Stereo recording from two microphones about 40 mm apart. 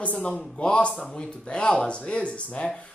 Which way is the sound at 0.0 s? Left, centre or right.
Left.